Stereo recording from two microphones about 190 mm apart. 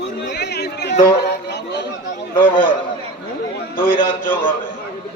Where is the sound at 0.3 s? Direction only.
60° left (ahead or behind).